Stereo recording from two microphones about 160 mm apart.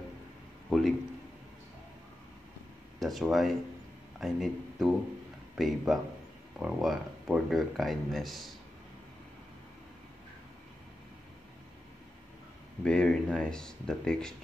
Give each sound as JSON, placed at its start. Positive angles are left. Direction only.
{"t": 0.7, "sound": "a sound", "side_deg": 0}
{"t": 3.0, "sound": "a man's voice", "side_deg": 0}
{"t": 12.8, "sound": "speech", "side_deg": 5}